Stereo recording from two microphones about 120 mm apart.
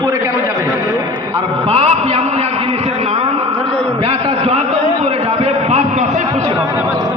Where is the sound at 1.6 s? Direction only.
60° right (ahead or behind).